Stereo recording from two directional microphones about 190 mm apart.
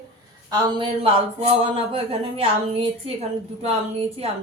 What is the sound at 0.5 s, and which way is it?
A woman's voice, 25° right (ahead or behind).